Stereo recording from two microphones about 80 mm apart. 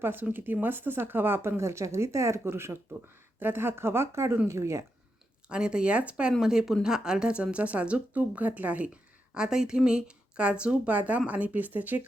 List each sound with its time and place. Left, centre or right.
0.0 s speech: right
5.5 s speech: centre